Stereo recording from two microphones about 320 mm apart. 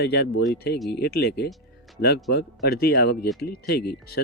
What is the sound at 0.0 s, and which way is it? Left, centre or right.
Speech, left.